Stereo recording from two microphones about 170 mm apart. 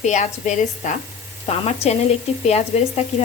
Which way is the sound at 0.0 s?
45° left (ahead or behind).